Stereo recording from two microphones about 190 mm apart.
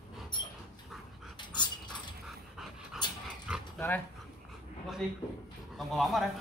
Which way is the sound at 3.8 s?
10° left (ahead or behind).